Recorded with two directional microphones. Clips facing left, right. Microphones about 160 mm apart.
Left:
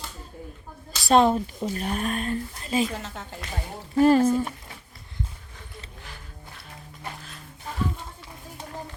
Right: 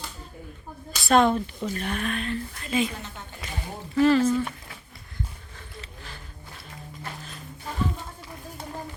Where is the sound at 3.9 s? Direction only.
45° left (ahead or behind).